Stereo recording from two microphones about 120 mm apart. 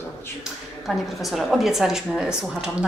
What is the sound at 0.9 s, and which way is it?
A woman's voice, centre (ahead or behind).